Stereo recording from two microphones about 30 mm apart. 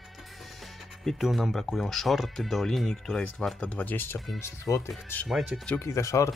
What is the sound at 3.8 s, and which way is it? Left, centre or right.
Speech, left.